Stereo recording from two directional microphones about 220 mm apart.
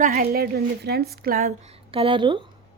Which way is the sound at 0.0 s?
45° right (ahead or behind).